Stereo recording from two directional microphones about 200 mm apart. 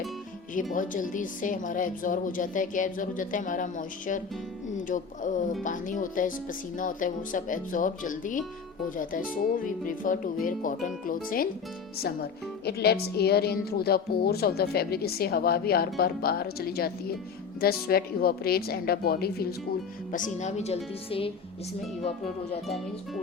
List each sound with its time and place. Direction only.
0.7 s speech: 40° left (ahead or behind)